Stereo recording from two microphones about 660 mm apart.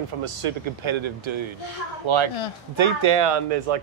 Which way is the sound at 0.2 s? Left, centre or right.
Right.